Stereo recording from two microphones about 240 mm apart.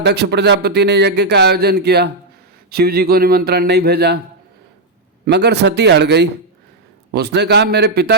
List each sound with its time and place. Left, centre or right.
0.0 s a man's voice: right
5.2 s a man's voice: right